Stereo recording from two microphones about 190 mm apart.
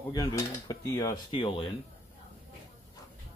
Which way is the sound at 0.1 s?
20° left (ahead or behind).